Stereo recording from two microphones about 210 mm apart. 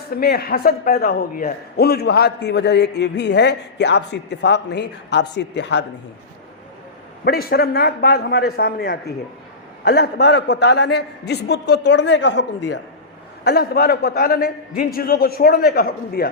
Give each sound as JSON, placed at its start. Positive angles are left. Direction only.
{"t": 0.1, "sound": "a man's voice", "side_deg": 45}
{"t": 7.3, "sound": "a man's voice", "side_deg": 45}